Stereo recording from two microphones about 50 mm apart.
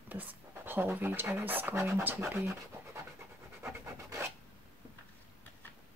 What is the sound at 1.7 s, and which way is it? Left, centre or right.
Speech, right.